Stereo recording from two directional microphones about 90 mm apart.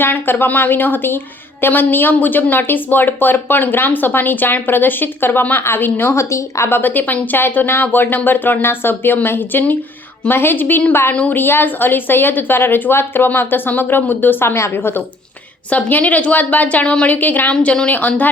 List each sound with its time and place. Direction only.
0.0 s a woman's voice: 25° left (ahead or behind)